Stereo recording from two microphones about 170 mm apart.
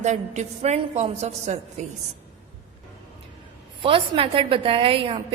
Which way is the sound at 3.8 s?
30° right (ahead or behind).